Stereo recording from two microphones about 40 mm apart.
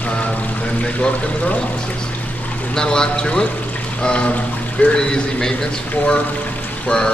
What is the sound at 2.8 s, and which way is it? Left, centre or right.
Speech, centre.